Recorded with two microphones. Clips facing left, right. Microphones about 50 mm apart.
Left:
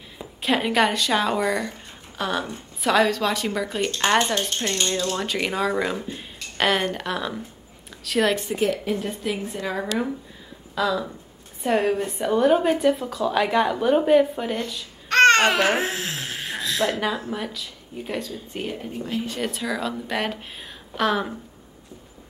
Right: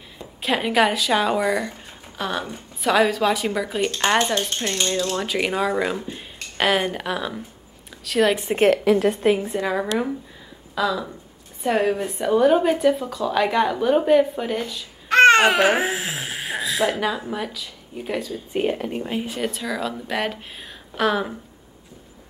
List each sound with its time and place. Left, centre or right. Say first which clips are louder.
0.2 s a woman's voice: even; centre
8.5 s a woman's voice: right 6 dB; right
8.8 s a woman's voice: right 9 dB; right
9.6 s speech: right 3 dB; centre
18.5 s speech: right 9 dB; right
18.8 s speech: right 5 dB; right
19.2 s speech: right 1 dB; centre